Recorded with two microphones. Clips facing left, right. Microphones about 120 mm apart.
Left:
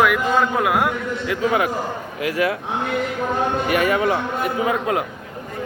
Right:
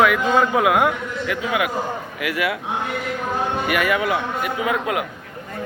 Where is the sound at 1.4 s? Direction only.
35° left (ahead or behind).